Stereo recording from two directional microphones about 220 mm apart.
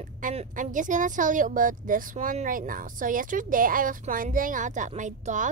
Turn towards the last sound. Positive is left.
turn(degrees=-35)  # may be behind; listen again after turning